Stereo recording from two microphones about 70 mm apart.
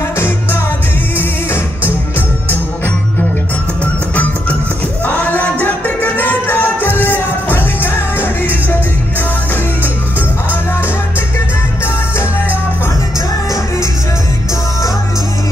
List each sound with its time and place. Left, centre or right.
1.1 s music: left
3.8 s music: left